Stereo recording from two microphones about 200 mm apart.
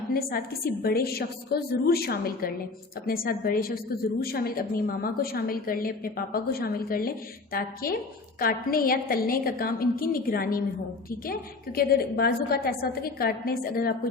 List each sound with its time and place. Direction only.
0.1 s a woman's voice: 50° left (ahead or behind)